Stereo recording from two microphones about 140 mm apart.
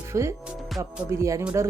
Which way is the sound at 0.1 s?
20° right (ahead or behind).